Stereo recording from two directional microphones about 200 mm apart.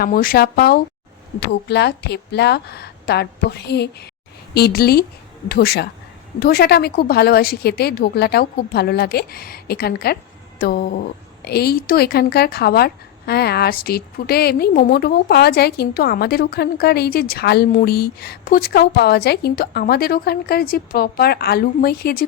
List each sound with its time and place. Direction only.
0.0 s a woman's voice: 45° left (ahead or behind)